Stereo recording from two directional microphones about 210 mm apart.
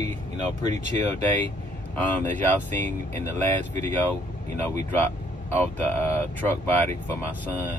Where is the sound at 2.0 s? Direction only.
10° left (ahead or behind).